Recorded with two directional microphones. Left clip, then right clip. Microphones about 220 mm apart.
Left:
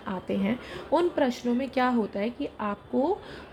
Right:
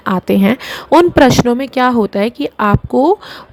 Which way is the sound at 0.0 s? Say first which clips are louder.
Right 17 dB; 40° right (ahead or behind).